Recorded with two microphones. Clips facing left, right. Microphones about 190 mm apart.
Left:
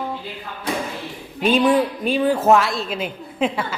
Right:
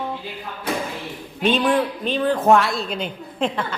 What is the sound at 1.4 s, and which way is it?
A woman's voice, 5° left (ahead or behind).